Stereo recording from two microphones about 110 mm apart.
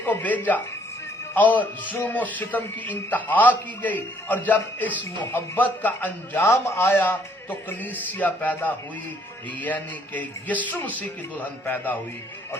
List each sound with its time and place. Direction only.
0.0 s a man's voice: 15° left (ahead or behind)